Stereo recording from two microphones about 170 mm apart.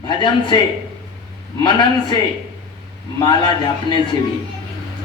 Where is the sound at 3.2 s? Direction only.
25° left (ahead or behind).